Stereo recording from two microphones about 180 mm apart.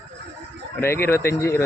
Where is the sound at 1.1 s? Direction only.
15° left (ahead or behind).